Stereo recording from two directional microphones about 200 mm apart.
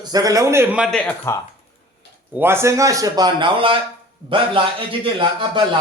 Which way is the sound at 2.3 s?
10° right (ahead or behind).